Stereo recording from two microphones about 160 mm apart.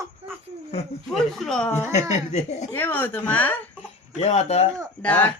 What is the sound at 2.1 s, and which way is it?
Speech, 45° left (ahead or behind).